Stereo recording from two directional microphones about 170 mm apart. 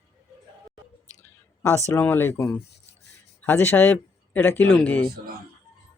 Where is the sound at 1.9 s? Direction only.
10° left (ahead or behind).